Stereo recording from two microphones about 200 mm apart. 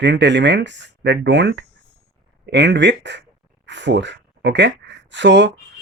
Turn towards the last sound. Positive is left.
turn(degrees=-65)  # may be behind; listen again after turning